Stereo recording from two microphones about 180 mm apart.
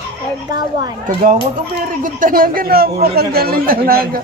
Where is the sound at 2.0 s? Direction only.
50° right (ahead or behind).